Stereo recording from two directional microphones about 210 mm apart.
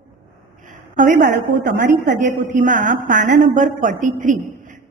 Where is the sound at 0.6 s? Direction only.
40° right (ahead or behind).